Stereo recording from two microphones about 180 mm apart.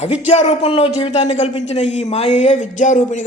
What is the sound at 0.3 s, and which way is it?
Speech, 40° left (ahead or behind).